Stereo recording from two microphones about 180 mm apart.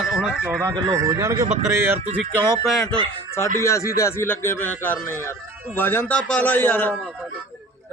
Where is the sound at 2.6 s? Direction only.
Centre (ahead or behind).